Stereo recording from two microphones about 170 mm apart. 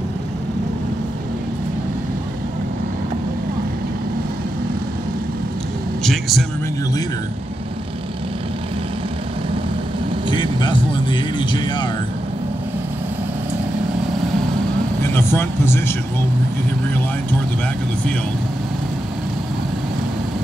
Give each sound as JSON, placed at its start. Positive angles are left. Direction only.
{"t": 6.0, "sound": "vehicle", "side_deg": 0}
{"t": 10.3, "sound": "music", "side_deg": 30}
{"t": 15.1, "sound": "speech", "side_deg": 15}